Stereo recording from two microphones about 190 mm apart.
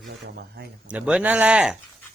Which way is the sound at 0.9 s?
5° right (ahead or behind).